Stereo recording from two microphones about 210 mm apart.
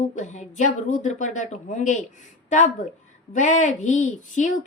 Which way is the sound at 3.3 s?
35° left (ahead or behind).